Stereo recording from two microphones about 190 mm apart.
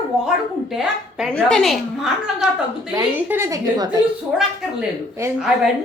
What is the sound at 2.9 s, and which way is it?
A woman's voice, 15° right (ahead or behind).